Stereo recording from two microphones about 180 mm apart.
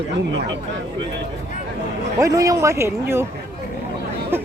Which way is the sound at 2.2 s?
20° right (ahead or behind).